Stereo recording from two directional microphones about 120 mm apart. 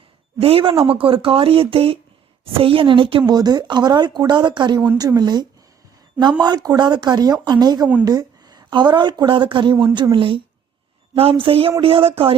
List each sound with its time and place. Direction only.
0.3 s a woman's voice: 50° right (ahead or behind)